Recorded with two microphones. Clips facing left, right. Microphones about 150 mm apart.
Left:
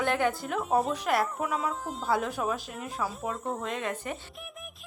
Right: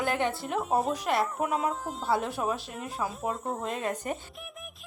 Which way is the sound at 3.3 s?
Centre (ahead or behind).